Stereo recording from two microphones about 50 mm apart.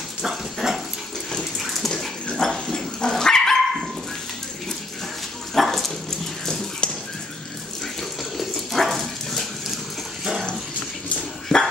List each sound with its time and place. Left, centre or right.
0.2 s dog: centre
5.5 s dog: centre
8.4 s dog: centre
11.5 s dog: centre